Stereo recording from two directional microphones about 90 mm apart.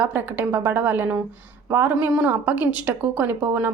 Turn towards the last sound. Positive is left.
turn(degrees=-20)  # may be behind; listen again after turning